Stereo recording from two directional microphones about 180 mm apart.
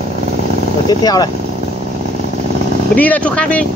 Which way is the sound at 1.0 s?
20° left (ahead or behind).